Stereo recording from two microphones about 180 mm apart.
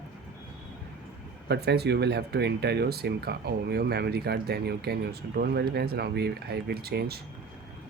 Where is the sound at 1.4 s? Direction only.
65° right (ahead or behind).